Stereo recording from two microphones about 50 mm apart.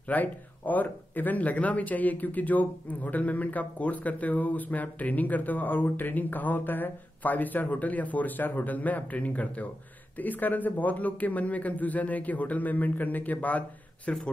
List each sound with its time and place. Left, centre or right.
0.1 s speech: left